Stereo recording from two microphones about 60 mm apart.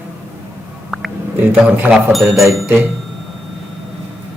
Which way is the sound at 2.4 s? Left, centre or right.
Right.